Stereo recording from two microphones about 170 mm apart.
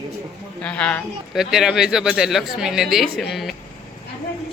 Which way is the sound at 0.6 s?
10° left (ahead or behind).